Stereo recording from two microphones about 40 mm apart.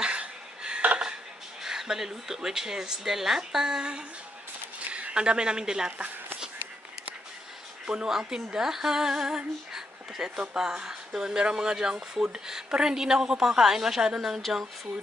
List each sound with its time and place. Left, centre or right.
0.0 s a sound: right
1.6 s speech: centre
7.8 s speech: centre